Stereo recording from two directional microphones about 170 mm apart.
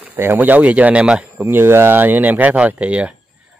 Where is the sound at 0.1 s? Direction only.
10° right (ahead or behind).